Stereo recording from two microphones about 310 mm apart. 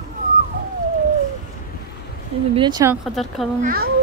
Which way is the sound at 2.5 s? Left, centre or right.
Centre.